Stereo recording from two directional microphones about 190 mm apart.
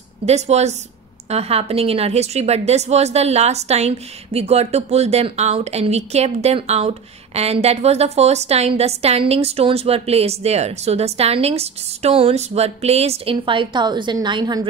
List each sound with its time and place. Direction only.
0.2 s a woman's voice: 35° right (ahead or behind)